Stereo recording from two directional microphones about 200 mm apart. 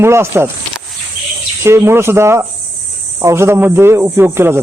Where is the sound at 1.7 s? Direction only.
15° right (ahead or behind).